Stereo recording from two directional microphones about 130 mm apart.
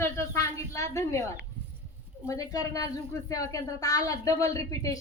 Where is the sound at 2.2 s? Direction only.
25° left (ahead or behind).